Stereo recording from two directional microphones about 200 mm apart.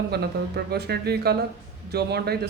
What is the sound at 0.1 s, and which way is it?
Speech, 55° right (ahead or behind).